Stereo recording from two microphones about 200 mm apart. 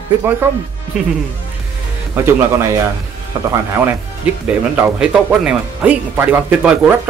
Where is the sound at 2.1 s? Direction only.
10° right (ahead or behind).